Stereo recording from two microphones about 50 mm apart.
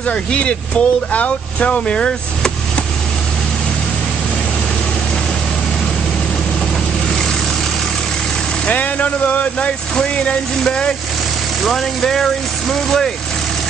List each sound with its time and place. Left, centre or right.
0.0 s speech: centre
8.6 s speech: left; by 13.1 s centre